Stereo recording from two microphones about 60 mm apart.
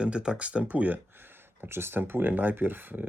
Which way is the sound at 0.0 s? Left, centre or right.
Centre.